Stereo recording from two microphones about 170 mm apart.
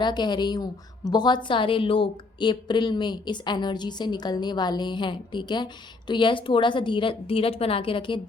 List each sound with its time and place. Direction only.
0.0 s a woman's voice: 25° left (ahead or behind)